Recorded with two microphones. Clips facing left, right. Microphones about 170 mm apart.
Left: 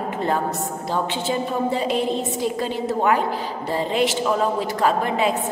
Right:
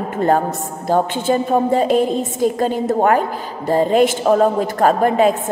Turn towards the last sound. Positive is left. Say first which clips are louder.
# right 7 dB
turn(degrees=-50)  # may be behind; listen again after turning